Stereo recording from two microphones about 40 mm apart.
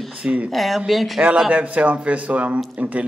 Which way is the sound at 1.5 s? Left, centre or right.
Right.